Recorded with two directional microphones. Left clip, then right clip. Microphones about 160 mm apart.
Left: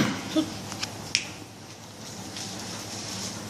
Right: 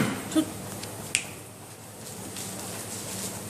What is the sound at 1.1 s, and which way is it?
Finger snapping, 35° right (ahead or behind).